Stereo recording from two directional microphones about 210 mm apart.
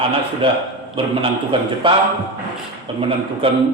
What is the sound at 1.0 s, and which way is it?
A man's voice, 25° right (ahead or behind).